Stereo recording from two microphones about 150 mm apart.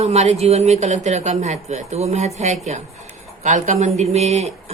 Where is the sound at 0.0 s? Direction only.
45° right (ahead or behind).